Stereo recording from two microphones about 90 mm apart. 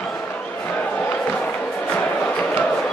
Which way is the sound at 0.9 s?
20° left (ahead or behind).